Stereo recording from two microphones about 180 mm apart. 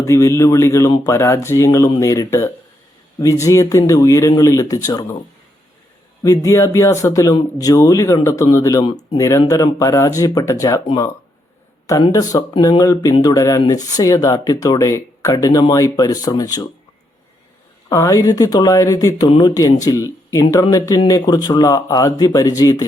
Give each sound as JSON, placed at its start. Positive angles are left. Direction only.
{"t": 0.0, "sound": "speech", "side_deg": 15}
{"t": 6.2, "sound": "speech", "side_deg": 20}
{"t": 17.8, "sound": "speech", "side_deg": 20}